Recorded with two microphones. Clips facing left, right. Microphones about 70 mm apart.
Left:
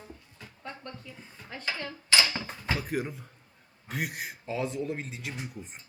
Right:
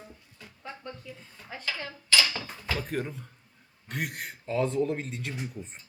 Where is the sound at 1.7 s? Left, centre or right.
Left.